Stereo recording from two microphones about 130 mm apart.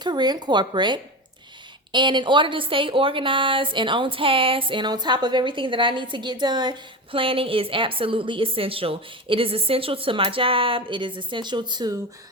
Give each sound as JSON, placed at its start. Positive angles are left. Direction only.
{"t": 0.0, "sound": "a woman's voice", "side_deg": -35}